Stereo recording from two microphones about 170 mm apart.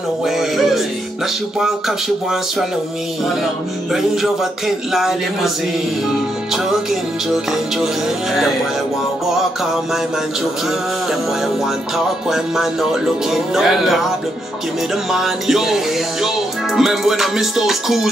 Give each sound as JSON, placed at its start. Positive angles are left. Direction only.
{"t": 0.2, "sound": "music", "side_deg": 0}
{"t": 3.9, "sound": "music", "side_deg": 0}
{"t": 6.5, "sound": "music", "side_deg": 0}
{"t": 11.1, "sound": "music", "side_deg": 0}